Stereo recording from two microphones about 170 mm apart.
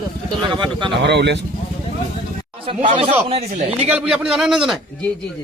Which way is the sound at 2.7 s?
35° right (ahead or behind).